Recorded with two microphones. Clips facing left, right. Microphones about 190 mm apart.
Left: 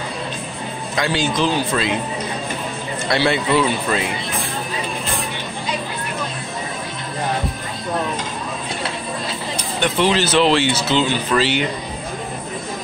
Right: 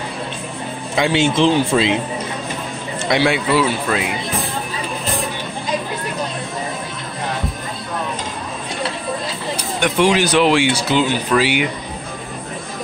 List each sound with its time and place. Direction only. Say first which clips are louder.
0.9 s speech: right 4 dB; 25° right (ahead or behind)
3.1 s speech: right 1 dB; 10° right (ahead or behind)
9.8 s speech: right 2 dB; 10° right (ahead or behind)